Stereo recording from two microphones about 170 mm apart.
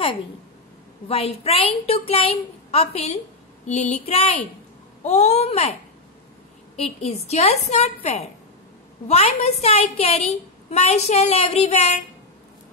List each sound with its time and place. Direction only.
1.0 s a woman's voice: 35° left (ahead or behind)
6.8 s a woman's voice: 40° left (ahead or behind)